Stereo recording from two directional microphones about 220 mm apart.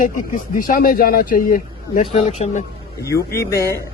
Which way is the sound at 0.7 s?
40° left (ahead or behind).